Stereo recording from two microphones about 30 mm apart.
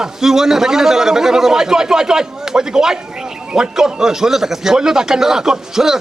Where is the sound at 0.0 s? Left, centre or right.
Centre.